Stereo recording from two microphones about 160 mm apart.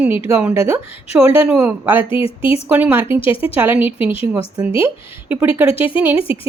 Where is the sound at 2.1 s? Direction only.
35° left (ahead or behind).